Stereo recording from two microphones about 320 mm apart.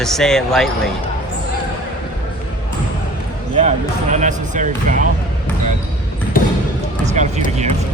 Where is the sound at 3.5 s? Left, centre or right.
Right.